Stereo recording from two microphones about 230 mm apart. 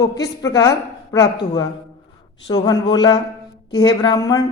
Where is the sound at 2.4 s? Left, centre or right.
Centre.